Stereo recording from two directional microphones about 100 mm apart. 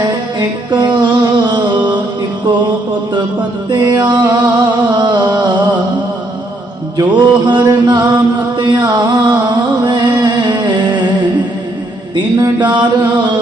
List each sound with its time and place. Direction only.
0.3 s a sound: 45° right (ahead or behind)
3.7 s music: 50° right (ahead or behind)
6.9 s chant: 45° right (ahead or behind)
12.1 s mantra: 45° right (ahead or behind)